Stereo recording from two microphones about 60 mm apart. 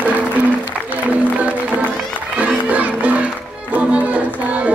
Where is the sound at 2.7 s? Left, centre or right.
Right.